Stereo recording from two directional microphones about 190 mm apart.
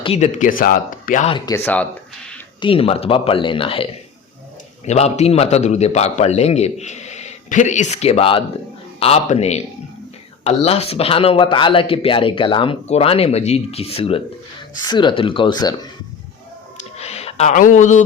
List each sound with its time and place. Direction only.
0.0 s speech: 35° left (ahead or behind)
1.3 s speech: 15° left (ahead or behind)
2.6 s speech: 30° left (ahead or behind)
4.9 s speech: 35° left (ahead or behind)
17.0 s a sound: 35° left (ahead or behind)